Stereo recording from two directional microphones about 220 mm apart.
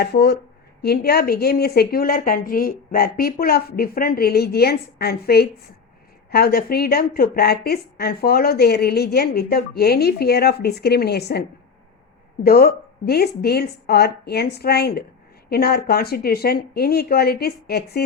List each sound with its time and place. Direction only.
0.0 s a woman's voice: 45° left (ahead or behind)